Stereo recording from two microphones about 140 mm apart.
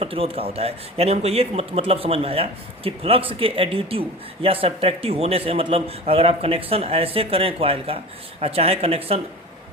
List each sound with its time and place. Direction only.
0.0 s speech: 40° right (ahead or behind)